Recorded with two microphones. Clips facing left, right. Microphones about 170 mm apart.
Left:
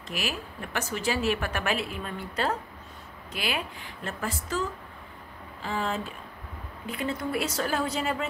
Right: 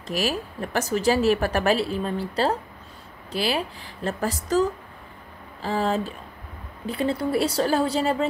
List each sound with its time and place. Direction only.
0.1 s speech: 40° right (ahead or behind)